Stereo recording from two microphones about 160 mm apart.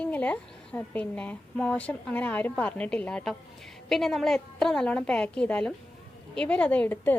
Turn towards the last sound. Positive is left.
turn(degrees=10)  # may be behind; listen again after turning